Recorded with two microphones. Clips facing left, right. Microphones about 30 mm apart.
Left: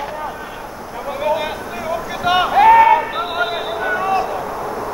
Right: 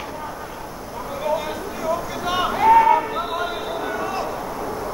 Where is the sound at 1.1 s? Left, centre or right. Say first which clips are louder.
Left 5 dB; left.